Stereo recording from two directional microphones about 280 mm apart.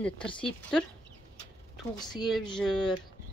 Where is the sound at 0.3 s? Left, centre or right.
Centre.